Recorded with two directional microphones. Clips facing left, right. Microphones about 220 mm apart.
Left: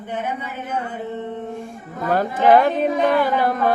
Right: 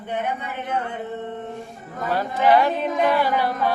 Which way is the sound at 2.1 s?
50° left (ahead or behind).